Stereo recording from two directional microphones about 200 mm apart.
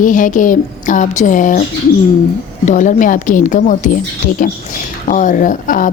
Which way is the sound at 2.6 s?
40° left (ahead or behind).